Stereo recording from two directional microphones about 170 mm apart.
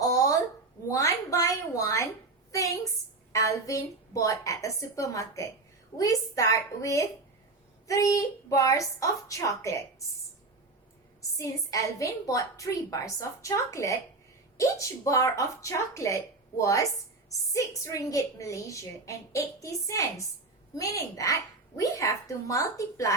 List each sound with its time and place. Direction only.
0.0 s a sound: 20° left (ahead or behind)
3.3 s speech: 20° left (ahead or behind)
11.2 s speech: 20° left (ahead or behind)